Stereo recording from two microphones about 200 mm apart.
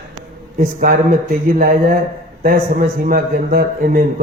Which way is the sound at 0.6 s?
45° right (ahead or behind).